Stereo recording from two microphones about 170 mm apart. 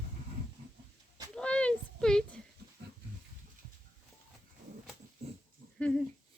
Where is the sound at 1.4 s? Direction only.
5° left (ahead or behind).